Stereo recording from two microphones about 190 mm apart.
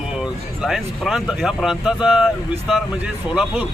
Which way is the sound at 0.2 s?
Centre (ahead or behind).